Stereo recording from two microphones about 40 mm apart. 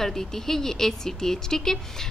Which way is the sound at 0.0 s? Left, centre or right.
Centre.